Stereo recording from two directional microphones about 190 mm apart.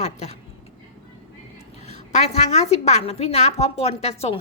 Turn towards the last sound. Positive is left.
turn(degrees=35)  # may be behind; listen again after turning